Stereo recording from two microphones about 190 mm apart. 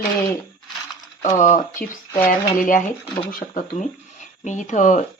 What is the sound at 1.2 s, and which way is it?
Speech, 40° left (ahead or behind).